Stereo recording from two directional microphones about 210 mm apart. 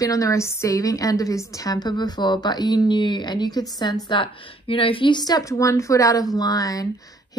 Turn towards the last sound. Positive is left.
turn(degrees=15)  # may be behind; listen again after turning